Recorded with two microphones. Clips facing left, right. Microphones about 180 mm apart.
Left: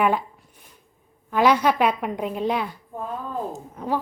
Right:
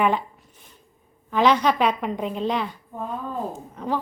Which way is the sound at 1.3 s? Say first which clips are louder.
Even; 10° left (ahead or behind).